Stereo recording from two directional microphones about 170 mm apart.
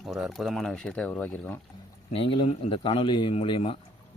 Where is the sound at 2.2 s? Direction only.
30° left (ahead or behind).